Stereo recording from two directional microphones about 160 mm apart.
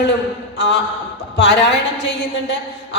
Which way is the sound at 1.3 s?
90° left.